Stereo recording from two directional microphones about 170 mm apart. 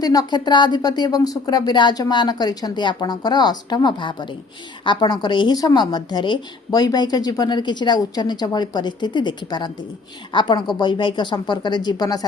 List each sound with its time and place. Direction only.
0.0 s a woman's voice: 20° left (ahead or behind)